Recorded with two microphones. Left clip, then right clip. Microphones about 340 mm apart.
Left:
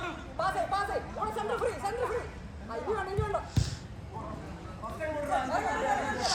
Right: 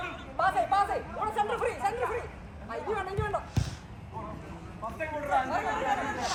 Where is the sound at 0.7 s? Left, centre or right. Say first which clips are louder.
Right 4 dB; centre.